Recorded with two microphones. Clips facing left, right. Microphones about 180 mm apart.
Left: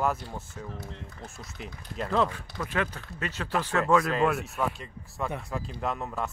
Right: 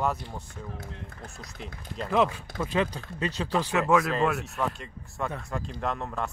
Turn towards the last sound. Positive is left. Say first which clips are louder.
# even
turn(degrees=5)  # may be behind; listen again after turning